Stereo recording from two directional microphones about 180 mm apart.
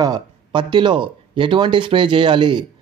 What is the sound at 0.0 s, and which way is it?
Speech, 25° right (ahead or behind).